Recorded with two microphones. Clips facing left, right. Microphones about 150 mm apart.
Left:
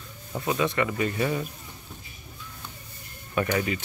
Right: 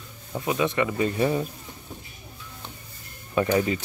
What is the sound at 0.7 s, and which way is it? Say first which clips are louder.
Speech: right 2 dB; 25° right (ahead or behind).